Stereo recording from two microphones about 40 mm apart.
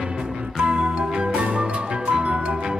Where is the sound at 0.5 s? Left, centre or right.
Right.